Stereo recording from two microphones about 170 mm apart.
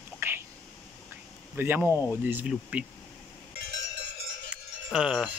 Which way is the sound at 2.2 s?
10° right (ahead or behind).